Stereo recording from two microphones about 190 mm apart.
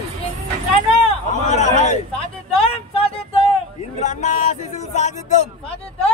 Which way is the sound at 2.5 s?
30° left (ahead or behind).